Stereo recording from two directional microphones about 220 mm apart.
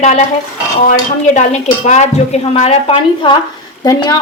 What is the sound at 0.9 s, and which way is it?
A woman's voice, 35° left (ahead or behind).